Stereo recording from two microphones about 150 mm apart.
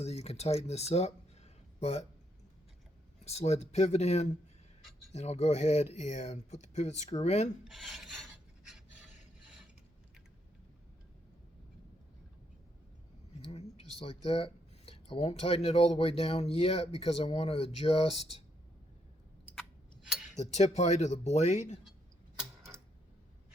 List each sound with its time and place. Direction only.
0.0 s speech: 45° left (ahead or behind)
3.2 s speech: 45° left (ahead or behind)
7.6 s filing: centre (ahead or behind)
9.4 s mechanisms: 5° right (ahead or behind)
13.4 s speech: 40° left (ahead or behind)
19.5 s tick-tock: centre (ahead or behind)
20.4 s speech: 50° left (ahead or behind)